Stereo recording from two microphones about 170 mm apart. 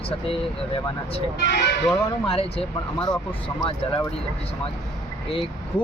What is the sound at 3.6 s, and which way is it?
Speech, 20° left (ahead or behind).